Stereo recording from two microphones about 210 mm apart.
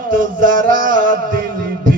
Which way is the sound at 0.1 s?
40° right (ahead or behind).